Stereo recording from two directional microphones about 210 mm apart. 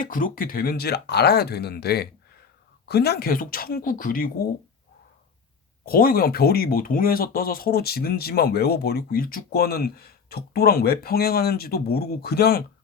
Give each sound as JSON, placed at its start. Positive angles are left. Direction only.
{"t": 0.0, "sound": "speech", "side_deg": 40}
{"t": 5.8, "sound": "speech", "side_deg": 45}